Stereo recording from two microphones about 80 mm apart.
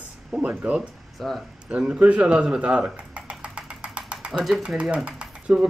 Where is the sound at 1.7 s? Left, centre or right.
Centre.